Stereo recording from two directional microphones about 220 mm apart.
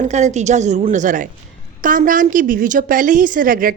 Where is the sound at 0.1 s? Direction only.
30° right (ahead or behind).